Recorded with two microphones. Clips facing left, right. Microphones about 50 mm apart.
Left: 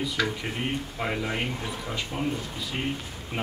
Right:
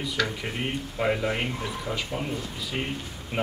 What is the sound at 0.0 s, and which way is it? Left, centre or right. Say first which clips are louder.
Speech: even; centre.